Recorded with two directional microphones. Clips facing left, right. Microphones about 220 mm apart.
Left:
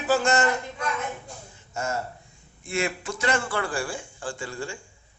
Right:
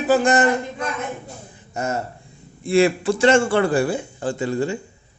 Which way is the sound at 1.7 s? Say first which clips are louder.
Right 5 dB; 20° right (ahead or behind).